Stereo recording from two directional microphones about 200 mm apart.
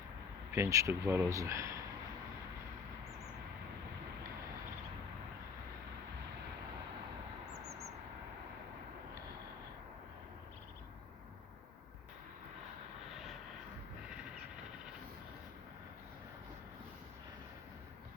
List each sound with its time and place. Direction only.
0.5 s speech: 15° right (ahead or behind)